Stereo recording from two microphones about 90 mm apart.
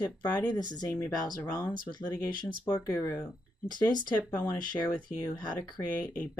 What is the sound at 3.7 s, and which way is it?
Speech, 55° left (ahead or behind).